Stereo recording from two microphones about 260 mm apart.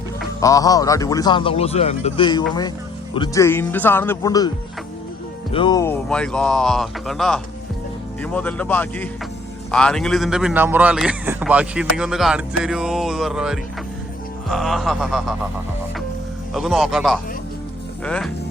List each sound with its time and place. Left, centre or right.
0.3 s a man's voice: centre
16.6 s speech: centre